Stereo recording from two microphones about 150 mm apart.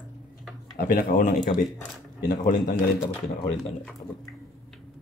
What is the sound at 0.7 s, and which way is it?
Speech, 70° left (ahead or behind).